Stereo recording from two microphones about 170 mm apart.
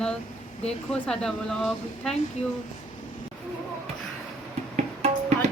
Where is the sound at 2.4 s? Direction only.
40° left (ahead or behind).